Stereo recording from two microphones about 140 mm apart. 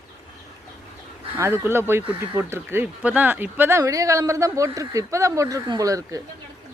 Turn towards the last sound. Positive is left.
turn(degrees=-25)  # may be behind; listen again after turning